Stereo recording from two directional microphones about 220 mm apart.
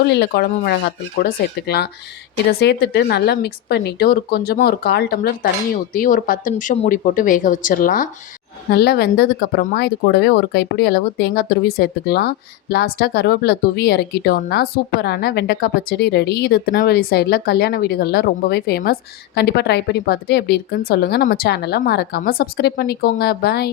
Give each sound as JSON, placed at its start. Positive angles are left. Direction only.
{"t": 0.1, "sound": "speech", "side_deg": 45}